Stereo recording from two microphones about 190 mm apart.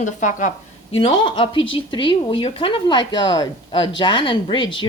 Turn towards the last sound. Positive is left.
turn(degrees=25)  # may be behind; listen again after turning